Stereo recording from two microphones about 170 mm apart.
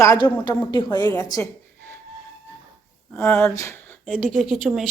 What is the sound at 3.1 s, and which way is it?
Speech, 10° left (ahead or behind).